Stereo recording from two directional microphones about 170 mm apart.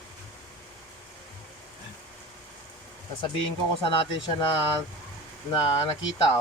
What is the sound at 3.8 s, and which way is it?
Speech, 30° left (ahead or behind).